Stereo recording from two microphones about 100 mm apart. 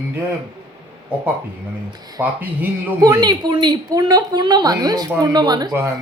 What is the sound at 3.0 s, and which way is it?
A woman's voice, 35° right (ahead or behind).